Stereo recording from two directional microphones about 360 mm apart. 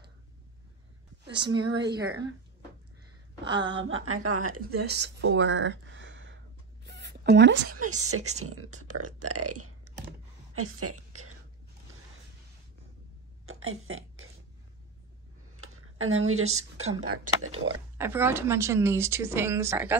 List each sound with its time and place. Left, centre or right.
1.5 s speech: right
3.4 s a woman's voice: right
4.6 s speech: right
6.8 s a sound: right
8.0 s a woman's voice: right
13.5 s a sound: right
15.5 s a woman's voice: right
17.9 s speech: centre